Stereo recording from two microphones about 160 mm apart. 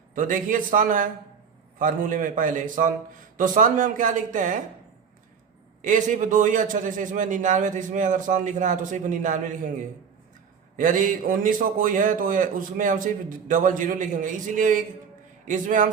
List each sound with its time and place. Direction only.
0.1 s a man's voice: 55° right (ahead or behind)
5.8 s a man's voice: 55° right (ahead or behind)
10.8 s a man's voice: 60° right (ahead or behind)